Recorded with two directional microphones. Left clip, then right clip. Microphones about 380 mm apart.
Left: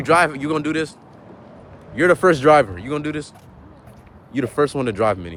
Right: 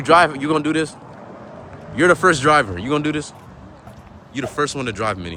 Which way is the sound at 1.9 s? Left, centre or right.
Centre.